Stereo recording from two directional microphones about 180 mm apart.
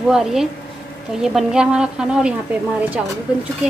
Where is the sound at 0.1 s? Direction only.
Centre (ahead or behind).